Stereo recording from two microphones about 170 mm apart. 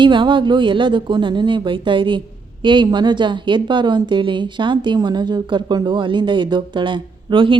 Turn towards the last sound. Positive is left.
turn(degrees=-30)  # may be behind; listen again after turning